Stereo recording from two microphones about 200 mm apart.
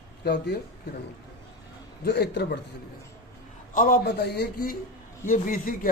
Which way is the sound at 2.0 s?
55° left (ahead or behind).